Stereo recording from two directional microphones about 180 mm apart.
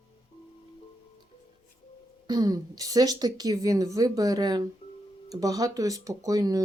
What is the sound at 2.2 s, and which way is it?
A woman's voice, 20° right (ahead or behind).